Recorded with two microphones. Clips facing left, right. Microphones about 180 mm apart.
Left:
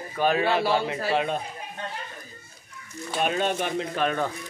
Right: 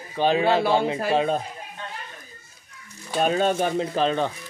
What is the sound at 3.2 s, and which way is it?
Speech, 35° right (ahead or behind).